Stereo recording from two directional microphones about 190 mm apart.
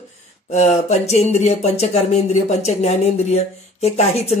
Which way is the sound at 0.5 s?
35° left (ahead or behind).